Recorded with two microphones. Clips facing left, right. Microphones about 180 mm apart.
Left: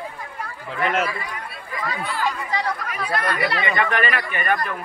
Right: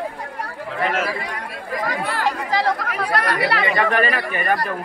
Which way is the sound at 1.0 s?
75° right (ahead or behind).